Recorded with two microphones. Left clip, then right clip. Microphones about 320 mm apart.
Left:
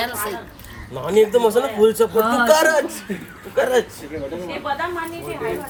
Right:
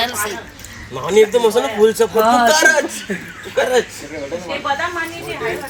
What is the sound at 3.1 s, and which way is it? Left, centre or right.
Speech, centre.